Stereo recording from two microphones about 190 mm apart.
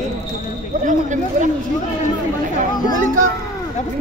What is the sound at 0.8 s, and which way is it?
Speech, 40° right (ahead or behind).